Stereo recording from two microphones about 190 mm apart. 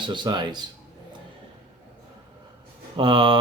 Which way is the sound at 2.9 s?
25° right (ahead or behind).